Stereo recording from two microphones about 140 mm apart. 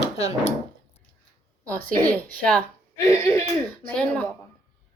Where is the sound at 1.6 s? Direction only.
10° left (ahead or behind).